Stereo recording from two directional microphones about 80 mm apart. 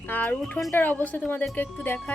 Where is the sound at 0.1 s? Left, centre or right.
Left.